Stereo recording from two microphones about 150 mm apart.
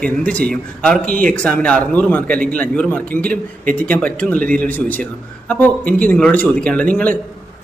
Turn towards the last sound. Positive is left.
turn(degrees=10)  # may be behind; listen again after turning